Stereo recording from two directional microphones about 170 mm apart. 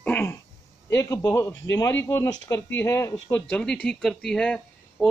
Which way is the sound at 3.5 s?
5° left (ahead or behind).